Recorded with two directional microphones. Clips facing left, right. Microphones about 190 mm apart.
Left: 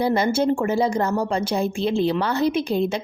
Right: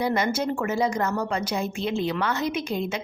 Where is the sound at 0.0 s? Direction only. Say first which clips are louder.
Left 5 dB; 30° left (ahead or behind).